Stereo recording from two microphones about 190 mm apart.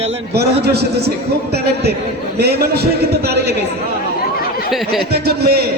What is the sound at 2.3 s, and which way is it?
A man's voice, 55° right (ahead or behind).